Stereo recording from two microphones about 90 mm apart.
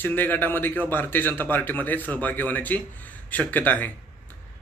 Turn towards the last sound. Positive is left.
turn(degrees=20)  # may be behind; listen again after turning